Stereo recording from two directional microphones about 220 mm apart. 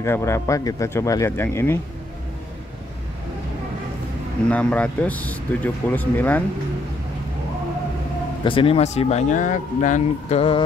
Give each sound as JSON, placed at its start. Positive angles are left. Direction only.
{"t": 0.0, "sound": "speech", "side_deg": 10}
{"t": 4.5, "sound": "speech", "side_deg": 5}
{"t": 8.5, "sound": "speech", "side_deg": 25}